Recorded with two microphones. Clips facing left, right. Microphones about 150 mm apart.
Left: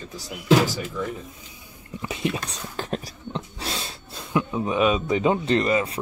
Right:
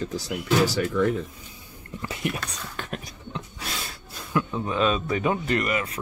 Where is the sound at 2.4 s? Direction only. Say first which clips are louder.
Left 3 dB; 30° left (ahead or behind).